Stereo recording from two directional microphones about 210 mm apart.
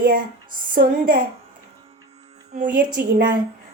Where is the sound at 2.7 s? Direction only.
40° right (ahead or behind).